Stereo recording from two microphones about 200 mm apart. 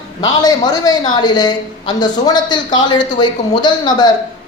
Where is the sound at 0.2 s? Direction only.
20° left (ahead or behind).